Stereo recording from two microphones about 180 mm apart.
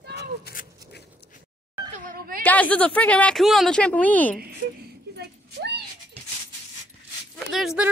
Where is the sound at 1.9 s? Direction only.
50° right (ahead or behind).